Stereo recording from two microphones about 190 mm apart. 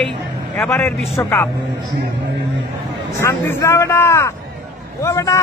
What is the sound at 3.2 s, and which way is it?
Speech, 15° left (ahead or behind).